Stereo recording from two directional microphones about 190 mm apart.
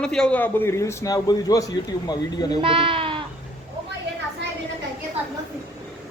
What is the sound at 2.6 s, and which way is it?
Sheep, 30° right (ahead or behind).